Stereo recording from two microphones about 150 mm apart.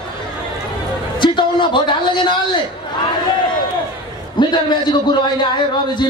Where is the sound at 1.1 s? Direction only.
30° left (ahead or behind).